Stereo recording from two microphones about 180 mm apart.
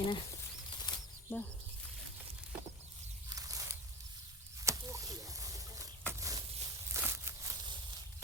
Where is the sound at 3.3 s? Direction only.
20° right (ahead or behind).